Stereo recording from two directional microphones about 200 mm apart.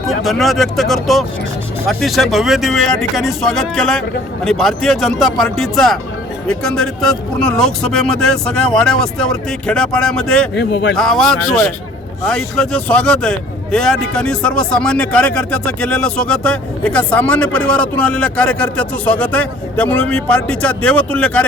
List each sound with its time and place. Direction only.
0.1 s speech: centre (ahead or behind)
10.5 s speech: 55° left (ahead or behind)
10.9 s speech: centre (ahead or behind)